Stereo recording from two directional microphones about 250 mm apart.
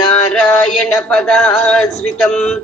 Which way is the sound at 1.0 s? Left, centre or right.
Centre.